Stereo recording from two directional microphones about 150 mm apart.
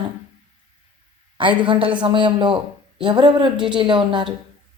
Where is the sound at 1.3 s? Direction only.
35° right (ahead or behind).